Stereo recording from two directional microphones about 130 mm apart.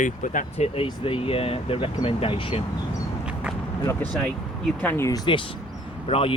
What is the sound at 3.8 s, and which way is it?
Speech, 15° left (ahead or behind).